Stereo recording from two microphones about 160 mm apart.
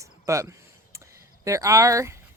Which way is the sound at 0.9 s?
20° right (ahead or behind).